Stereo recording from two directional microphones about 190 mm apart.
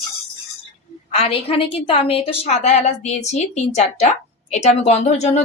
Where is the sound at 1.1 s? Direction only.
30° left (ahead or behind).